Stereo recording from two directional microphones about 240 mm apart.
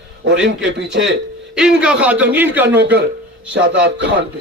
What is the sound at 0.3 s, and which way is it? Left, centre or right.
Speech, right.